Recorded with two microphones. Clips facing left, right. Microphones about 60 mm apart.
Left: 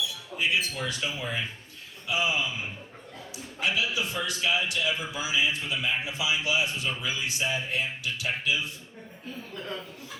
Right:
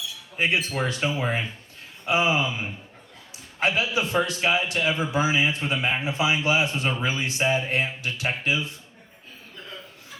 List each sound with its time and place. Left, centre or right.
0.3 s a man's voice: right